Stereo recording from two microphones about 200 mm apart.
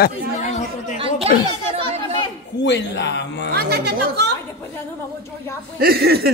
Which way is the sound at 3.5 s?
55° right (ahead or behind).